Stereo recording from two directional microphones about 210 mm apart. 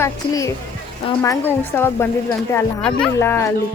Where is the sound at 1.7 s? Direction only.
10° left (ahead or behind).